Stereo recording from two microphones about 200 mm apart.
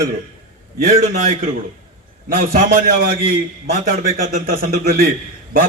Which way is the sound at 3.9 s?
45° right (ahead or behind).